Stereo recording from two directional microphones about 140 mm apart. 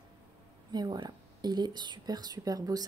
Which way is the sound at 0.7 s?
30° right (ahead or behind).